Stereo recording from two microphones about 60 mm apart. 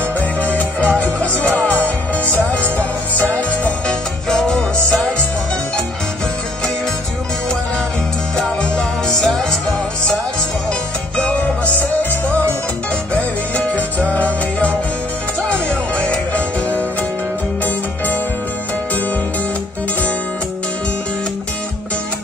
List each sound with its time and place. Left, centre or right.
0.2 s music: left
3.8 s music: centre
8.4 s music: centre
11.1 s music: left
14.1 s music: left
17.6 s music: left